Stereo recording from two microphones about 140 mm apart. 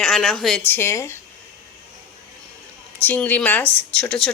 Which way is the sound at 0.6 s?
15° left (ahead or behind).